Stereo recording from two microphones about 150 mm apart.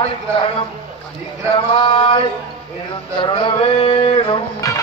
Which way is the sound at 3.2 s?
35° left (ahead or behind).